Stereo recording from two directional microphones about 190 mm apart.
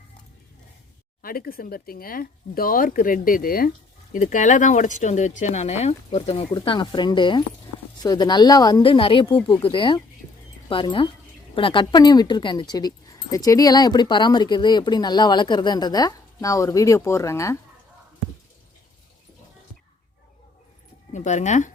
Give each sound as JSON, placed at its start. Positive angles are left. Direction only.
{"t": 1.2, "sound": "speech", "side_deg": 50}
{"t": 21.1, "sound": "speech", "side_deg": 40}